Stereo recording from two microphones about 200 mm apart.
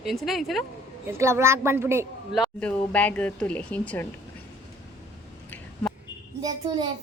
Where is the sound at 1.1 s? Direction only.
15° right (ahead or behind).